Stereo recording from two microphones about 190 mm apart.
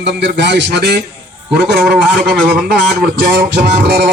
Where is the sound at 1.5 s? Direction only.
65° right (ahead or behind).